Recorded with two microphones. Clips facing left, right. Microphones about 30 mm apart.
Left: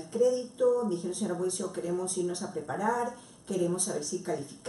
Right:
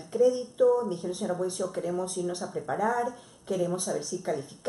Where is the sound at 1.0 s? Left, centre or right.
Centre.